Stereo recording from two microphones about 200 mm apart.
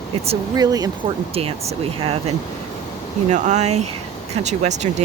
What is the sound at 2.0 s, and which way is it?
Speech, 30° right (ahead or behind).